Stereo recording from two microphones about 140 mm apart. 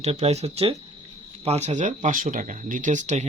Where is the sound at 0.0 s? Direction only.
50° right (ahead or behind).